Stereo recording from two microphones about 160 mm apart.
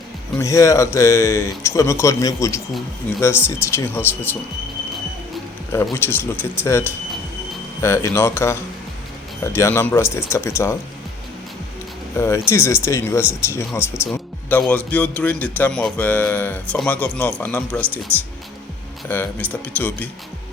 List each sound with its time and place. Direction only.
0.3 s speech: 20° left (ahead or behind)
5.7 s speech: 15° left (ahead or behind)
12.1 s speech: 15° left (ahead or behind)
19.0 s speech: 15° left (ahead or behind)